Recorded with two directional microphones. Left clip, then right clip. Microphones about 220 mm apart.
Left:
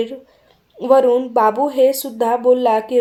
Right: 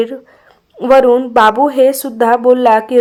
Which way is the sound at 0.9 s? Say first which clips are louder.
Right 6 dB; 20° right (ahead or behind).